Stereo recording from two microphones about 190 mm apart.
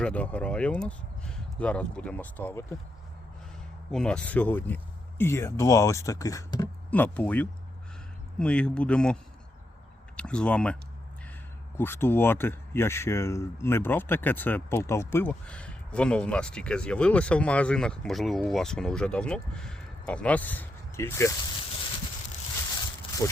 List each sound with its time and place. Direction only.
0.0 s speech: 5° left (ahead or behind)
3.9 s speech: 5° left (ahead or behind)
6.9 s speech: 10° left (ahead or behind)
10.2 s speech: 5° left (ahead or behind)
11.8 s speech: 10° left (ahead or behind)
23.2 s speech: 15° left (ahead or behind)